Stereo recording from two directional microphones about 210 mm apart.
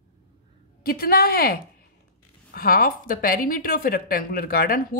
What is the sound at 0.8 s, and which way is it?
A woman's voice, 45° left (ahead or behind).